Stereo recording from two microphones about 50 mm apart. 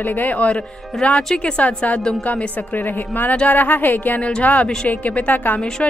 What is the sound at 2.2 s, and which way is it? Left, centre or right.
A woman's voice, left.